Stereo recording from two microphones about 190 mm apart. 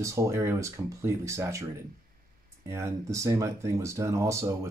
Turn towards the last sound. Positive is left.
turn(degrees=-15)  # may be behind; listen again after turning